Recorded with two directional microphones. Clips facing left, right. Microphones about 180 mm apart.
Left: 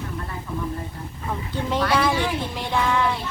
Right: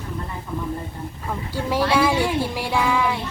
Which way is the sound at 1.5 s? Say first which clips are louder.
Right 2 dB; 10° right (ahead or behind).